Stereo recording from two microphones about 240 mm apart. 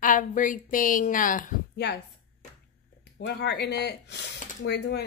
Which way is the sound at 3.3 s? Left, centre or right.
Left.